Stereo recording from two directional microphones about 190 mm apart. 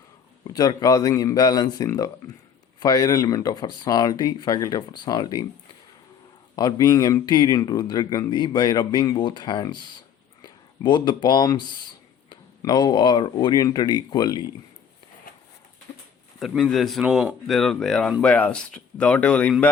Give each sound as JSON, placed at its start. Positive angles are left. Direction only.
{"t": 0.4, "sound": "speech", "side_deg": 20}
{"t": 6.6, "sound": "speech", "side_deg": 20}
{"t": 16.4, "sound": "speech", "side_deg": 0}